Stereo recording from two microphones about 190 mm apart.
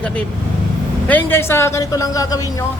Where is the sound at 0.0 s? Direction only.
5° left (ahead or behind).